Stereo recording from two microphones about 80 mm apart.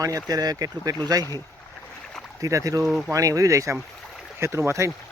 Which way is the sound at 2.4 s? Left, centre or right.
Right.